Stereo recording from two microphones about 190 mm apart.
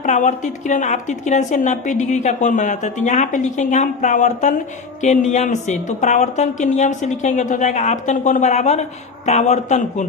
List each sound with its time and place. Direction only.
0.0 s a woman's voice: 40° left (ahead or behind)